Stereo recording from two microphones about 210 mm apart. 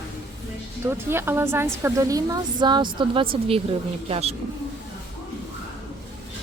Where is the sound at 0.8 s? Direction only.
10° right (ahead or behind); by 4.3 s 30° right (ahead or behind).